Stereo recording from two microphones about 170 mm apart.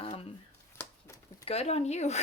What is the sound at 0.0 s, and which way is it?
Shuffling cards, 35° left (ahead or behind).